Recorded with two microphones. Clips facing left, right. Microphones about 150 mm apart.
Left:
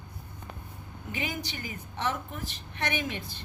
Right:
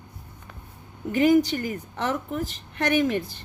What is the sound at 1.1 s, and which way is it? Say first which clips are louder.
A woman's voice: right 17 dB; 45° right (ahead or behind).